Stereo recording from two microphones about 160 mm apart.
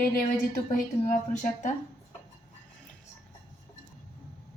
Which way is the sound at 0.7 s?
55° left (ahead or behind).